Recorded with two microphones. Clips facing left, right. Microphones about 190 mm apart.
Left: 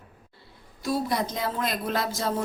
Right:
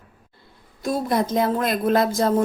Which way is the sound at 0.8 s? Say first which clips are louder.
Right 4 dB; 50° right (ahead or behind).